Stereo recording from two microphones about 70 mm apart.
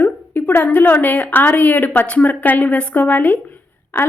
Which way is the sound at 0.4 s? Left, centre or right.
Left.